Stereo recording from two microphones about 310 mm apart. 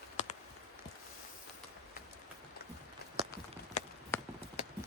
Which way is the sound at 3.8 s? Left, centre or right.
Left.